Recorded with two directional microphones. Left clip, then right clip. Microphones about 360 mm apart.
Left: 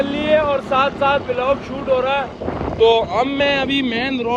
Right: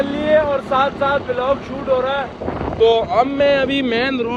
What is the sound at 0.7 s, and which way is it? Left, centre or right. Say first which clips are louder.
Speech: even; centre.